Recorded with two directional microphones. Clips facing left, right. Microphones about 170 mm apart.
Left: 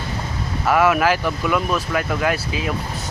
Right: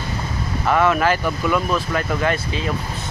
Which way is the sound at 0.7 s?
5° left (ahead or behind).